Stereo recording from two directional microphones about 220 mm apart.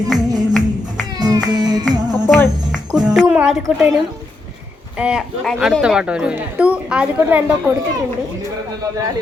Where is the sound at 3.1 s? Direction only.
5° right (ahead or behind).